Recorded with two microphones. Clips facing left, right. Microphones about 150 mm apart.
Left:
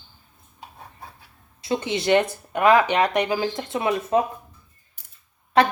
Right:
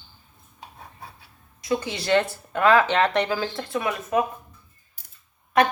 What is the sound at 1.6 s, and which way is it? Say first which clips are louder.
Speech: left 2 dB; 25° left (ahead or behind).